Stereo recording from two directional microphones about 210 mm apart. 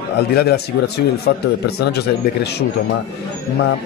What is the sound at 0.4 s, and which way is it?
Speech, 50° left (ahead or behind).